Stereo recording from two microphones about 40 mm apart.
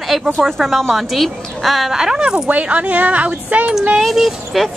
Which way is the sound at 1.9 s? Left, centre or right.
Centre.